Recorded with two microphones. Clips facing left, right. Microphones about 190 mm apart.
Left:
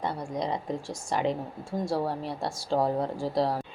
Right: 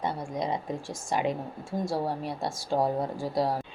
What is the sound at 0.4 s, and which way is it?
Speech, 20° right (ahead or behind).